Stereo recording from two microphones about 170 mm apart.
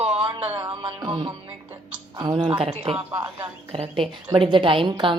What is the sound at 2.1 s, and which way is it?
A woman's voice, 30° right (ahead or behind).